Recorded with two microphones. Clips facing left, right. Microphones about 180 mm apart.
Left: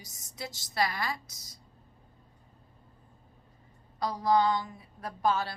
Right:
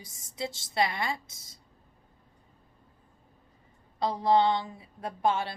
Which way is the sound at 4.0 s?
25° right (ahead or behind).